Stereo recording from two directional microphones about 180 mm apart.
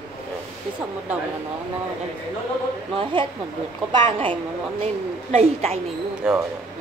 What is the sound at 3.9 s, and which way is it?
A woman's voice, 30° right (ahead or behind).